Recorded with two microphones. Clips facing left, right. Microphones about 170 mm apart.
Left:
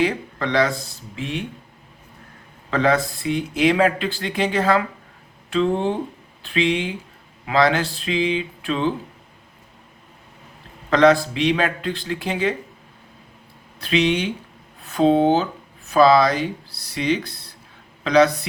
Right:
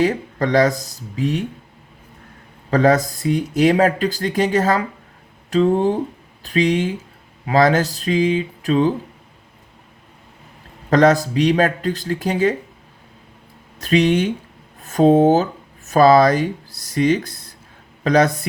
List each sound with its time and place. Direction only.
0.0 s speech: 45° right (ahead or behind)
2.6 s speech: 40° right (ahead or behind)
10.8 s speech: 45° right (ahead or behind)
13.7 s speech: 45° right (ahead or behind)